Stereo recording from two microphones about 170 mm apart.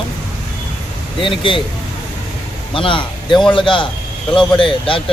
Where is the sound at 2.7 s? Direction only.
30° left (ahead or behind).